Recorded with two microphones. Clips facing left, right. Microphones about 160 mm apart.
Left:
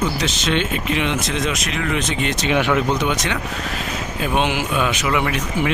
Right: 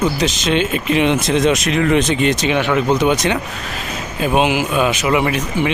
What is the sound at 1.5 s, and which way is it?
Speech, 35° right (ahead or behind).